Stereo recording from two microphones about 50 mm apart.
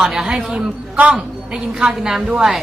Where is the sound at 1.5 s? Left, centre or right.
Centre.